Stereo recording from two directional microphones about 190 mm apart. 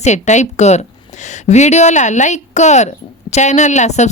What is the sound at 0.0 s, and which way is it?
Speech, 40° left (ahead or behind).